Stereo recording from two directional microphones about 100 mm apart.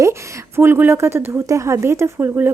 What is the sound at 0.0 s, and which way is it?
A woman's voice, 25° right (ahead or behind).